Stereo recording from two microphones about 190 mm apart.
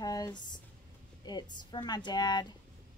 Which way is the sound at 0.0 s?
20° left (ahead or behind).